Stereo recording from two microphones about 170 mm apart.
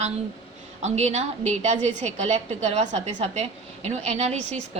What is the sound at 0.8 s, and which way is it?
A woman's voice, 40° right (ahead or behind).